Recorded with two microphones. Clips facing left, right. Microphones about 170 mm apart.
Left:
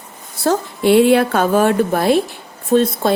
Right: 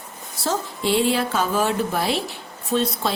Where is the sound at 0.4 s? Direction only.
60° left (ahead or behind).